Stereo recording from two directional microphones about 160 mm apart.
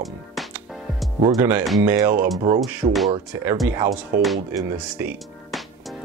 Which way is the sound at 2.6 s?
Centre (ahead or behind).